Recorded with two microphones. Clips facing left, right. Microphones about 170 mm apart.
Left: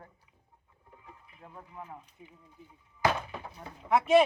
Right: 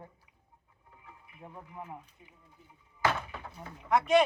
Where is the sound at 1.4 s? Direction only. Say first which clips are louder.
Right 2 dB; 15° right (ahead or behind).